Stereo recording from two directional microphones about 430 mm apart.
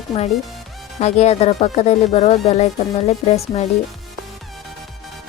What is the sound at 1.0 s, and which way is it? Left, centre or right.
A woman's voice, centre.